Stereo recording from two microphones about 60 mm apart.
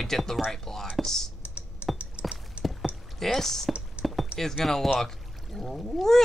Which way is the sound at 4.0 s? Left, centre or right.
Centre.